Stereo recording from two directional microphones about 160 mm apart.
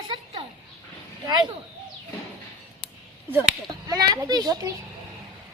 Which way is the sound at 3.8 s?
25° right (ahead or behind).